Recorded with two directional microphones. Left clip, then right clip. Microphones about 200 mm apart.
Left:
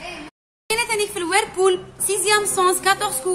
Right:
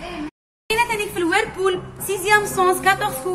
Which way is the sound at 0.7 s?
40° left (ahead or behind).